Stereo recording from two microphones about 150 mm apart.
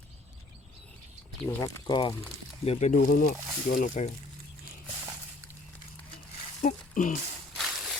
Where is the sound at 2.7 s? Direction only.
45° left (ahead or behind).